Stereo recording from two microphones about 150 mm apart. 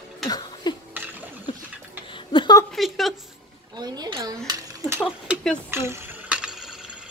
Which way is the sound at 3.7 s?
25° right (ahead or behind).